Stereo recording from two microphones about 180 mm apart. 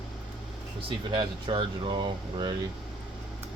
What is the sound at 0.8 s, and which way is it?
Speech, 30° right (ahead or behind).